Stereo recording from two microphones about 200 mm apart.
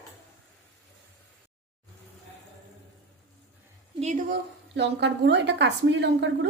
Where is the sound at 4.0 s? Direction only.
35° right (ahead or behind).